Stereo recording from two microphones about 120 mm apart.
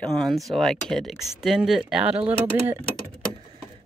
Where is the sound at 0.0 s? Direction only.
Centre (ahead or behind).